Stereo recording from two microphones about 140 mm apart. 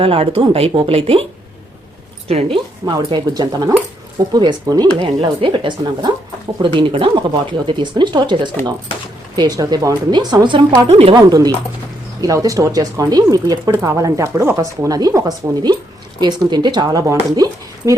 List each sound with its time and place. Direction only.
0.0 s speech: 45° right (ahead or behind)
2.2 s speech: 45° right (ahead or behind)
2.8 s speech: 30° right (ahead or behind)